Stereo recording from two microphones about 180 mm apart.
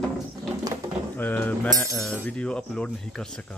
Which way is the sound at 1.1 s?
10° left (ahead or behind).